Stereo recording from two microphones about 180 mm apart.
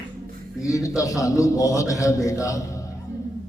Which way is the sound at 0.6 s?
20° left (ahead or behind).